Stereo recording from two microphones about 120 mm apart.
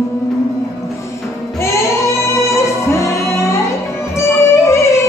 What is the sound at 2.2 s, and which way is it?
Music, 25° left (ahead or behind).